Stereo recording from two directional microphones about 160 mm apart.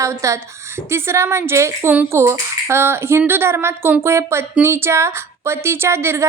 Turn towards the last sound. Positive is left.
turn(degrees=-15)  # may be behind; listen again after turning